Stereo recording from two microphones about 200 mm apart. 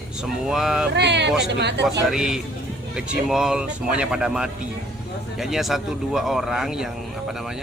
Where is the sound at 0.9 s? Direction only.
60° right (ahead or behind).